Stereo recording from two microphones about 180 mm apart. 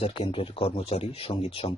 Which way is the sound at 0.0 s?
30° left (ahead or behind).